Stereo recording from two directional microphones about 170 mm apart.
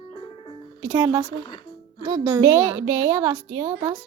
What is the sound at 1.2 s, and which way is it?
Speech, 25° left (ahead or behind).